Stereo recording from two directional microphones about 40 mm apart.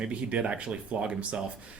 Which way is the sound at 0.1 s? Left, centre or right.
Right.